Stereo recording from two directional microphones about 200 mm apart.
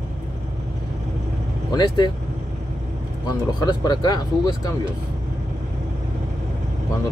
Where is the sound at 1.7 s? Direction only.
20° left (ahead or behind).